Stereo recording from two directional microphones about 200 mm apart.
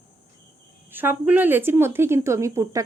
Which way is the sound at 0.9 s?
10° right (ahead or behind).